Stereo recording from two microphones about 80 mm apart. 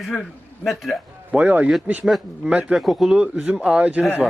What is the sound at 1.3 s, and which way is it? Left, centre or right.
Speech, right.